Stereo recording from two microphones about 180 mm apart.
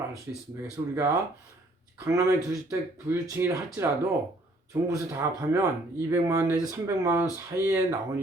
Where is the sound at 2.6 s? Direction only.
15° right (ahead or behind).